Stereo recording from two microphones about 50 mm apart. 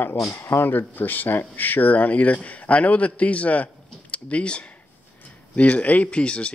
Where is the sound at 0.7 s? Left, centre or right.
Left.